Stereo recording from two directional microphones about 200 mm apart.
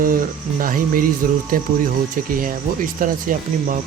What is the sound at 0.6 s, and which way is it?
Speech, 45° right (ahead or behind).